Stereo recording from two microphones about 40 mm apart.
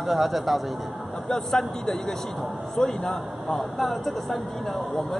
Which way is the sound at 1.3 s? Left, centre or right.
Centre.